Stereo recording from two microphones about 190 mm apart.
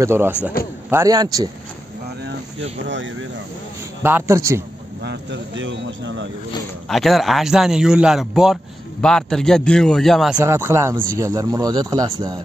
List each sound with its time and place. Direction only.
0.0 s a man's voice: 10° right (ahead or behind)
2.9 s speech: 75° right (ahead or behind)
4.0 s speech: 15° right (ahead or behind)
5.0 s speech: 65° right (ahead or behind)
6.9 s a man's voice: centre (ahead or behind)
10.4 s speech: 15° right (ahead or behind)